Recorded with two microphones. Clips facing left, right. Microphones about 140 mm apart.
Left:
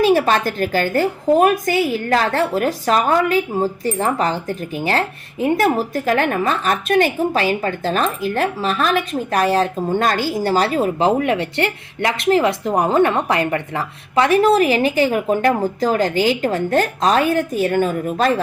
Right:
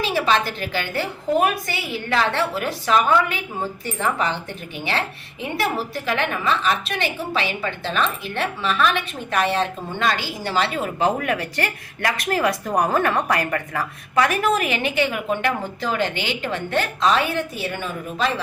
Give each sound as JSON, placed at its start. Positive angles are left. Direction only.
{"t": 0.0, "sound": "a woman's voice", "side_deg": 45}